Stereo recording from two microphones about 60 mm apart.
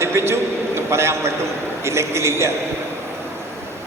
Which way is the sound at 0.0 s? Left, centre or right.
Right.